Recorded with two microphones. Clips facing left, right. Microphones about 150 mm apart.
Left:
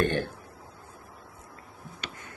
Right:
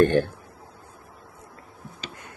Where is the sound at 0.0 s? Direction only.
45° right (ahead or behind).